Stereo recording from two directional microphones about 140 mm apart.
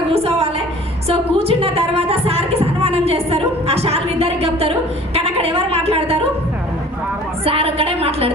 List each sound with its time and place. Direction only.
0.1 s a sound: 45° right (ahead or behind)
1.0 s a woman's voice: 45° right (ahead or behind)
7.4 s a woman's voice: 45° right (ahead or behind)